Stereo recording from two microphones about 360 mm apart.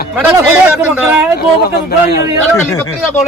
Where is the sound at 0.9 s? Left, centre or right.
Centre.